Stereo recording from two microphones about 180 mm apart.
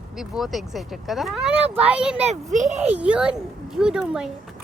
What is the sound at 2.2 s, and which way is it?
Speech, 40° right (ahead or behind).